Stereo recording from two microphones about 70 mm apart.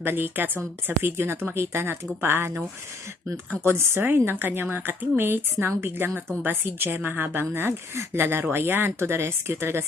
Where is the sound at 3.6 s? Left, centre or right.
Right.